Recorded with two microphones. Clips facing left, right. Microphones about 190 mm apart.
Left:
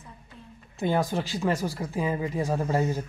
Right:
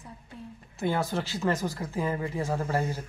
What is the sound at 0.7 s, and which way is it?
Speech, 15° left (ahead or behind).